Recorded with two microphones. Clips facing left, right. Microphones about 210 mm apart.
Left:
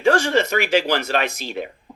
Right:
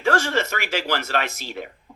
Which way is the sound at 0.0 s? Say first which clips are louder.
Left 4 dB; 15° left (ahead or behind).